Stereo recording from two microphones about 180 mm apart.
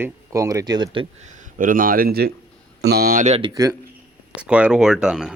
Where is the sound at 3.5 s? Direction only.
15° right (ahead or behind).